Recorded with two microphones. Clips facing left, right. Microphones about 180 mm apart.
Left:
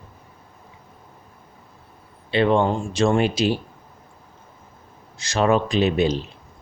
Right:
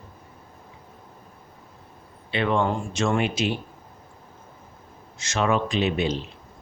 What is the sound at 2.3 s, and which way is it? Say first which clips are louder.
Speech: left 5 dB; 30° left (ahead or behind).